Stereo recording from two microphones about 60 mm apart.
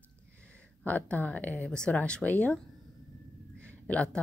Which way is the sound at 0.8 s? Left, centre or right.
Left.